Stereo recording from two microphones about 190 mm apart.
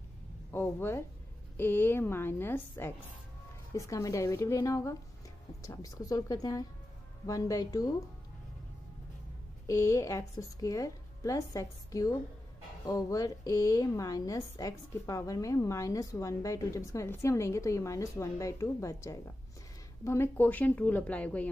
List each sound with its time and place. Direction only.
0.5 s a woman's voice: 10° left (ahead or behind)
9.7 s a woman's voice: 15° left (ahead or behind)